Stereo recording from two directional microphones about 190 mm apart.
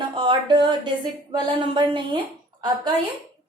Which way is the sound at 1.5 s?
25° right (ahead or behind).